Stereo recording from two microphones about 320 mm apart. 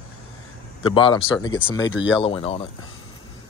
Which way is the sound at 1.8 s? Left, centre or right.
Left.